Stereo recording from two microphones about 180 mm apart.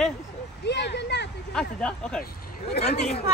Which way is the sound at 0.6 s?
70° left (ahead or behind).